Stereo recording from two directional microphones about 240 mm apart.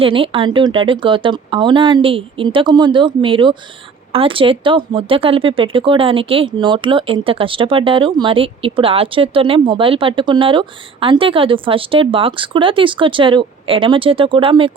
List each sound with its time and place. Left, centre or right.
0.0 s speech: right